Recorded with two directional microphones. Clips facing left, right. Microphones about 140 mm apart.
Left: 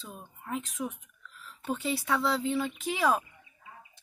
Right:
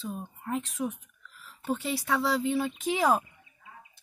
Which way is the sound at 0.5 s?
Centre (ahead or behind).